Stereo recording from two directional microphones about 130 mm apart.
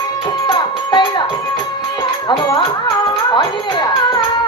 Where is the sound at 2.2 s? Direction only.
30° left (ahead or behind).